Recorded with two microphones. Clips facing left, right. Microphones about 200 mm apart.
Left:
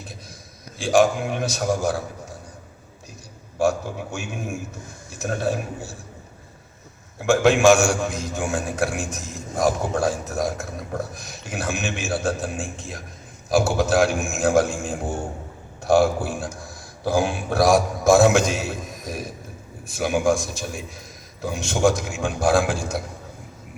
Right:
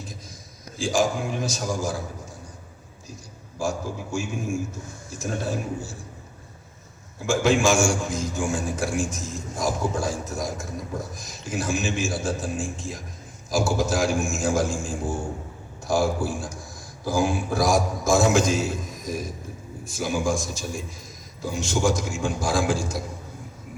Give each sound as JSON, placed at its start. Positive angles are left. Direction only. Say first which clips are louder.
{"t": 0.8, "sound": "a man's voice", "louder": "left 5 dB", "side_deg": 65}
{"t": 3.6, "sound": "a man's voice", "louder": "left 6 dB", "side_deg": 65}
{"t": 7.2, "sound": "a man's voice", "louder": "left 4 dB", "side_deg": 65}